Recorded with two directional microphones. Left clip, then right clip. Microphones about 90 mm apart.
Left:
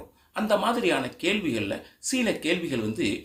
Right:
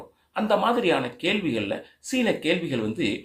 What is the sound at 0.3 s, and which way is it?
Speech, 25° left (ahead or behind).